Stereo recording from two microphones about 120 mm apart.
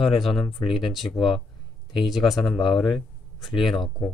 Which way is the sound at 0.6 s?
45° left (ahead or behind).